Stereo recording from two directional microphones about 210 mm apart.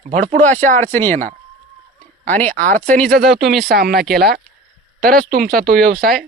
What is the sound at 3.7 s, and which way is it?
Speech, 50° right (ahead or behind).